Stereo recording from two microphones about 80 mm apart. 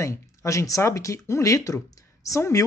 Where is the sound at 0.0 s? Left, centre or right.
Left.